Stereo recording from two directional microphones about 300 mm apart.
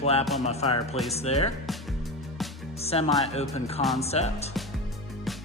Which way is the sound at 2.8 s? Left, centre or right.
Centre.